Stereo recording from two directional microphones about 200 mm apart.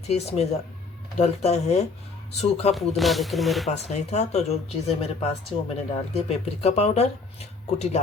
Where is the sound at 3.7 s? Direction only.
35° left (ahead or behind).